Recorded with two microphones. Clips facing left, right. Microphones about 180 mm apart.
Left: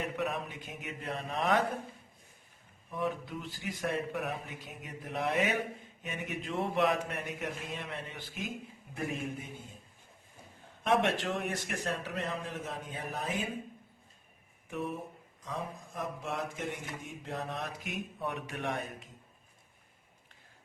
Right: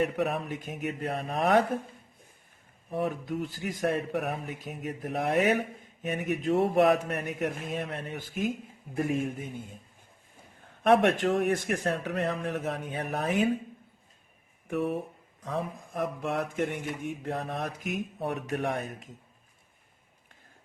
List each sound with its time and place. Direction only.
0.0 s speech: 45° right (ahead or behind)
2.9 s speech: 45° right (ahead or behind)
10.8 s speech: 55° right (ahead or behind)
14.7 s speech: 65° right (ahead or behind); by 19.0 s 45° right (ahead or behind)